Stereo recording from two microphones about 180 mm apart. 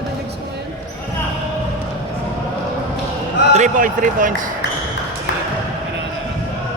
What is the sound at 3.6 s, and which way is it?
Speech, 45° right (ahead or behind).